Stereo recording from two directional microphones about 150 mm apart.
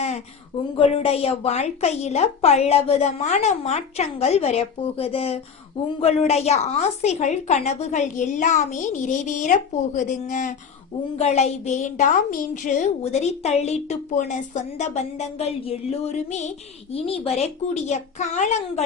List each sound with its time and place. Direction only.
0.8 s a woman's voice: 40° left (ahead or behind); by 10.5 s 60° left (ahead or behind)
11.2 s a woman's voice: 50° left (ahead or behind)